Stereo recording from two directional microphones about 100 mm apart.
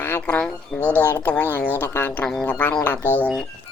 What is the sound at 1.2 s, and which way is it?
Speech, 20° left (ahead or behind).